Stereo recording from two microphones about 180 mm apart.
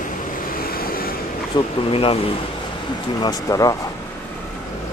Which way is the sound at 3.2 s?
20° left (ahead or behind).